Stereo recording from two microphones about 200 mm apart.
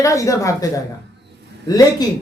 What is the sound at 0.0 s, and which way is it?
A woman's voice, 15° left (ahead or behind).